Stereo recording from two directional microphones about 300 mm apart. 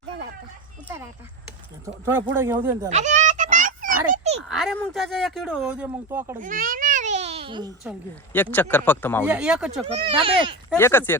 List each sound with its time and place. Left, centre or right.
2.0 s speech: centre
2.9 s goat: right
4.4 s speech: centre
6.4 s baby cry: right
8.3 s a man's voice: centre
9.2 s speech: centre
9.8 s speech: centre
10.7 s a man's voice: centre